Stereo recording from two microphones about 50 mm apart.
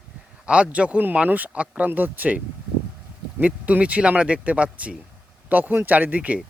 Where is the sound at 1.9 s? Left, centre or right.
Right.